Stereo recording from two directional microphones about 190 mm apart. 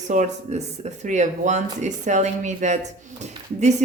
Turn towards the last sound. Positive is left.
turn(degrees=-35)  # may be behind; listen again after turning